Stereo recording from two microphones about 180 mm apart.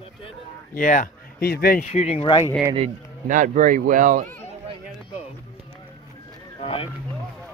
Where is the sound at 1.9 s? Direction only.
35° left (ahead or behind).